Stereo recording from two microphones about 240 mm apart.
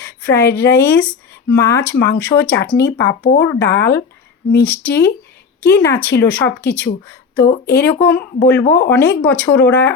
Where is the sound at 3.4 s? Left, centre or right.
Centre.